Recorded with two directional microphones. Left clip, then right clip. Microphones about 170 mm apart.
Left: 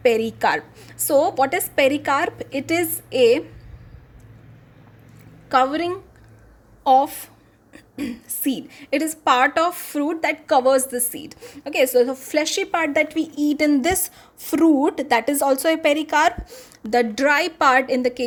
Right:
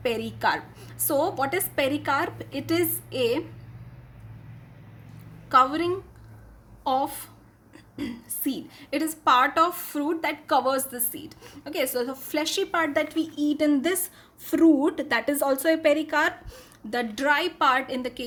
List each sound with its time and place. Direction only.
0.0 s a woman's voice: 30° left (ahead or behind)
5.5 s a woman's voice: 30° left (ahead or behind)